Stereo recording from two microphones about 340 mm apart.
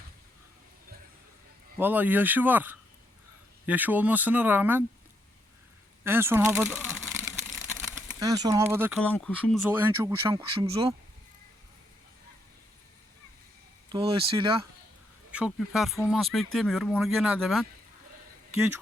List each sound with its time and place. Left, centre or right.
1.8 s speech: centre
6.1 s speech: centre
13.9 s speech: centre
15.3 s speech: centre